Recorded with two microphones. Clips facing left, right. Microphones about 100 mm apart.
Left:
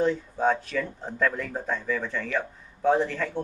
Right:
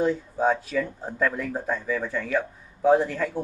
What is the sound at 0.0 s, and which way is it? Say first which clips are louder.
Speech: right 1 dB; 5° right (ahead or behind).